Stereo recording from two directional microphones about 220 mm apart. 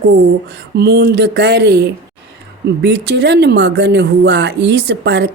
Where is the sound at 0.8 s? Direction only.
50° right (ahead or behind).